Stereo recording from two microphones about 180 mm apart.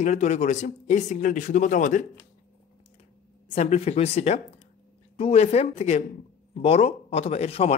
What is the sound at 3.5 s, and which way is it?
Speech, 35° left (ahead or behind).